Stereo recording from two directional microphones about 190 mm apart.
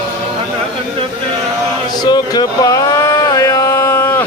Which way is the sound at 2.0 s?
20° left (ahead or behind).